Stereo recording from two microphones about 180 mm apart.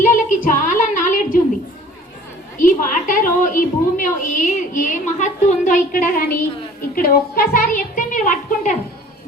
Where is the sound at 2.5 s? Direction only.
50° left (ahead or behind).